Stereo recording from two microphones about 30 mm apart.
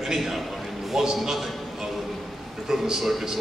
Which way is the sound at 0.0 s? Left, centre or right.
Centre.